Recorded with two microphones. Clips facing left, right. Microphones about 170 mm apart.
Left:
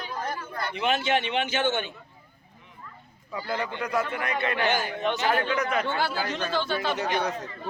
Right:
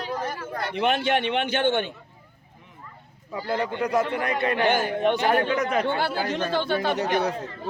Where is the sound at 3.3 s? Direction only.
35° right (ahead or behind).